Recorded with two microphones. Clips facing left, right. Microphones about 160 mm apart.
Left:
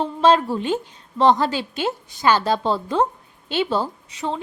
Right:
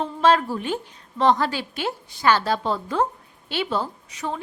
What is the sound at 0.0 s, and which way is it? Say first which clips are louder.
A woman's voice: left 2 dB; 25° left (ahead or behind).